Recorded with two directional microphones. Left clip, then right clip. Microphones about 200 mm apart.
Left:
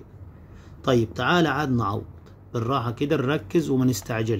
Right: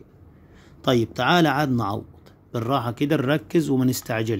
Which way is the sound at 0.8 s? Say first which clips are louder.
Right 1 dB; 30° right (ahead or behind).